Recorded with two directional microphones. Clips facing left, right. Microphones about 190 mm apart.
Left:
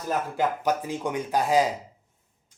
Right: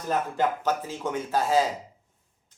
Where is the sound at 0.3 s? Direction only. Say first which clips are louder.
Left 1 dB; 10° left (ahead or behind).